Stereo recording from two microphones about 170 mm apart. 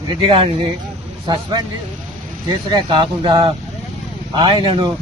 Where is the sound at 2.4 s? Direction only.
25° right (ahead or behind).